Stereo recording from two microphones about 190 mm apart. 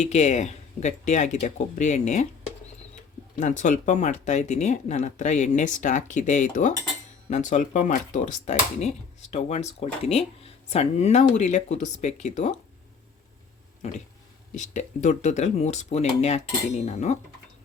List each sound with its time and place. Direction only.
0.0 s speech: 35° left (ahead or behind)
3.4 s speech: 40° left (ahead or behind)
13.8 s speech: 35° left (ahead or behind)